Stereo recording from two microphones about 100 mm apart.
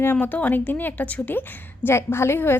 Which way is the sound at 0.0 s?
20° left (ahead or behind).